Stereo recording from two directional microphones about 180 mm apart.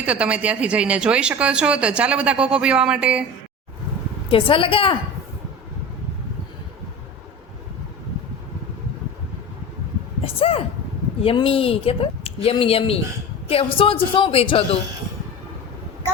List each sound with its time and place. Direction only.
0.0 s speech: 5° right (ahead or behind)
4.3 s a woman's voice: 30° left (ahead or behind)
10.2 s speech: 30° left (ahead or behind)